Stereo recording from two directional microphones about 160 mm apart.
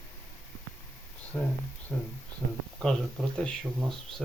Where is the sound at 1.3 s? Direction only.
10° left (ahead or behind).